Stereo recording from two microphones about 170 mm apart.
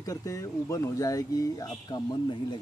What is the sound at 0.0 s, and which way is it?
Speech, 20° left (ahead or behind).